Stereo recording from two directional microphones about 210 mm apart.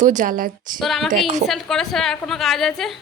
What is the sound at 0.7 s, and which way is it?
A woman's voice, centre (ahead or behind).